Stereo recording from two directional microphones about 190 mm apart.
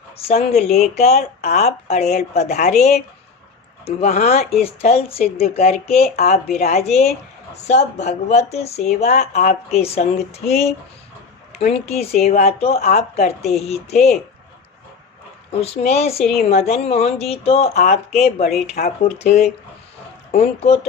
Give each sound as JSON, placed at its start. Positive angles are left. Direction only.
{"t": 0.3, "sound": "speech", "side_deg": 35}
{"t": 3.8, "sound": "speech", "side_deg": 35}
{"t": 15.6, "sound": "speech", "side_deg": 35}